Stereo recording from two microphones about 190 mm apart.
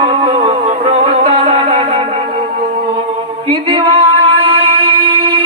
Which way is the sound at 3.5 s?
30° right (ahead or behind).